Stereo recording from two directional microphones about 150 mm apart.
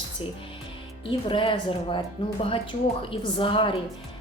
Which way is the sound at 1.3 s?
35° left (ahead or behind).